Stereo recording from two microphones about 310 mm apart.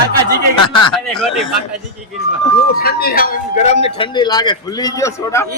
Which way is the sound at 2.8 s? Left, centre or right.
Left.